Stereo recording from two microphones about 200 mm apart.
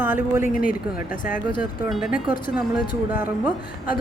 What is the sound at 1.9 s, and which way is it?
A woman's voice, centre (ahead or behind).